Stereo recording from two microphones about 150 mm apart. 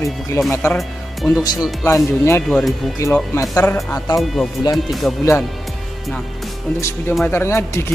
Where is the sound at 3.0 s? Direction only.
20° left (ahead or behind).